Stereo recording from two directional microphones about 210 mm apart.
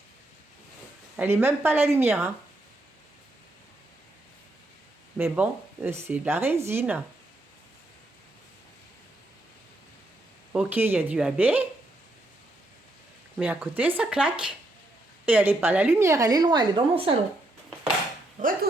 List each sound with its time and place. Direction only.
1.1 s a woman's voice: 10° right (ahead or behind)
5.1 s a woman's voice: 10° right (ahead or behind)
10.5 s a woman's voice: 5° right (ahead or behind)
13.3 s a woman's voice: 5° right (ahead or behind); by 17.2 s 25° right (ahead or behind)
18.4 s speech: 35° right (ahead or behind)